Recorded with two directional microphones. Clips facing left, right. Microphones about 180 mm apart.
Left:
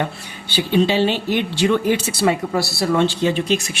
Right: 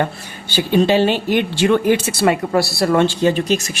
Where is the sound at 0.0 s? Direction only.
45° right (ahead or behind).